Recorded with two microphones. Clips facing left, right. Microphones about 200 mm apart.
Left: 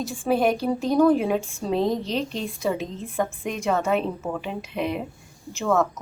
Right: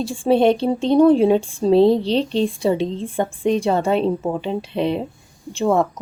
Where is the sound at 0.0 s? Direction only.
30° right (ahead or behind).